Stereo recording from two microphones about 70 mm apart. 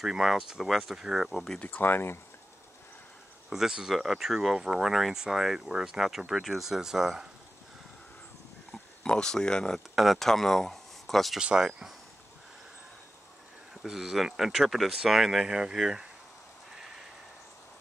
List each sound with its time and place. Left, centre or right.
0.0 s speech: centre
1.6 s speech: left
3.4 s speech: centre
9.0 s speech: centre
11.3 s speech: centre
13.8 s speech: centre